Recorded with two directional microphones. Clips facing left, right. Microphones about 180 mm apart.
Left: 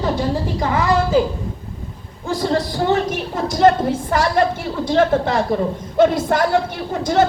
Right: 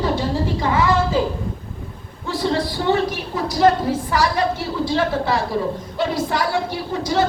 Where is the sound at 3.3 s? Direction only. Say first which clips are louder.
Left 2 dB; 50° left (ahead or behind).